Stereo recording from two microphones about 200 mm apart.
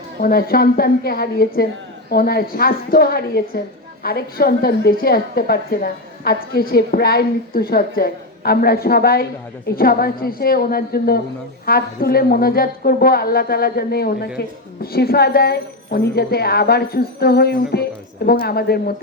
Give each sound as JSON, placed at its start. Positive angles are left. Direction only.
{"t": 0.2, "sound": "a woman's voice", "side_deg": 45}